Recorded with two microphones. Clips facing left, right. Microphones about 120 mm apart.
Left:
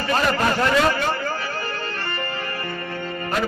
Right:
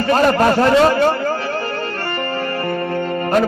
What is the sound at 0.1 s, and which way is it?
Speech, 40° right (ahead or behind).